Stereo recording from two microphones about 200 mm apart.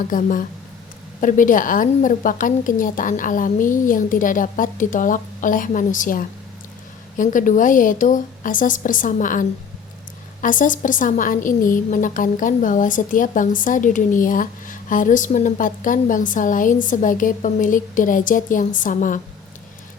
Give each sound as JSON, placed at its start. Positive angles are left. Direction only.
{"t": 0.1, "sound": "a woman's voice", "side_deg": 40}